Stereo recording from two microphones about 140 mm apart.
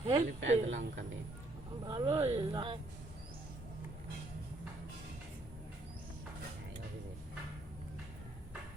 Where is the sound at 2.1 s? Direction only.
45° right (ahead or behind).